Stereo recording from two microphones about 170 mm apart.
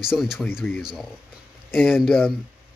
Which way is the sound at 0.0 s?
5° right (ahead or behind).